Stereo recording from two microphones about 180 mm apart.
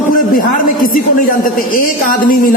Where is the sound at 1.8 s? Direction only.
50° left (ahead or behind).